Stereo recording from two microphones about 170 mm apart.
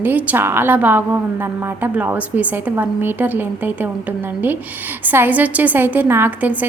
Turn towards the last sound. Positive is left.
turn(degrees=-10)  # may be behind; listen again after turning